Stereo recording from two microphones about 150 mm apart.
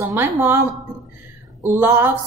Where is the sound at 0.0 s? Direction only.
15° right (ahead or behind).